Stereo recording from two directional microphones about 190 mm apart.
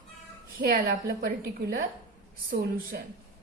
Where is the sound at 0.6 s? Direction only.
50° right (ahead or behind).